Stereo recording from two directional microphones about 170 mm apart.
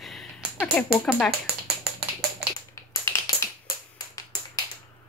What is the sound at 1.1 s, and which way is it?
Speech, 5° left (ahead or behind).